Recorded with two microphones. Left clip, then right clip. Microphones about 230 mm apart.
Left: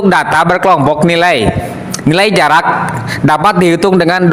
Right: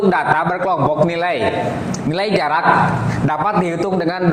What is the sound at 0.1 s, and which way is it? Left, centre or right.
Speech, left.